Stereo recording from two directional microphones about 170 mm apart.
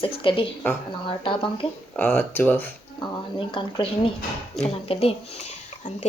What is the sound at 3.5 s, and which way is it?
Speech, 30° left (ahead or behind).